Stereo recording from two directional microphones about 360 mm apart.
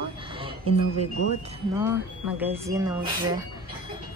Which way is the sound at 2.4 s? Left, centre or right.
Centre.